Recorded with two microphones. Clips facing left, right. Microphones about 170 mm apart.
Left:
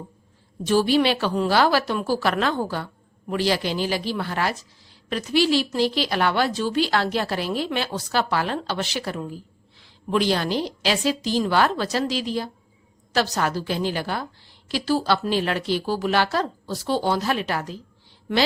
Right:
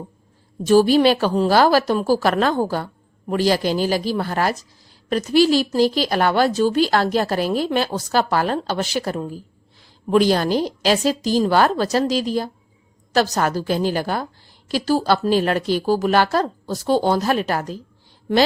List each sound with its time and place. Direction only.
0.6 s a woman's voice: 45° right (ahead or behind)